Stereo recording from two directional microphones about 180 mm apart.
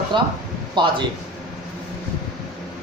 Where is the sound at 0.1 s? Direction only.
25° right (ahead or behind).